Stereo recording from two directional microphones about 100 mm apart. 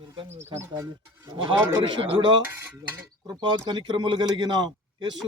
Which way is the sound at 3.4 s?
50° right (ahead or behind).